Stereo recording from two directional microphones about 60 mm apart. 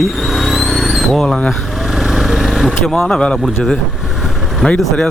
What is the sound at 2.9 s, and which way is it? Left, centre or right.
Speech, centre.